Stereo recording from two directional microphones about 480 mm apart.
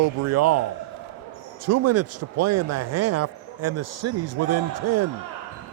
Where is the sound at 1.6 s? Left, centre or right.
Right.